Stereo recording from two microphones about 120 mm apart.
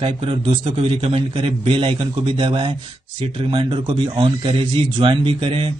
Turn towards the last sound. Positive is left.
turn(degrees=-50)  # may be behind; listen again after turning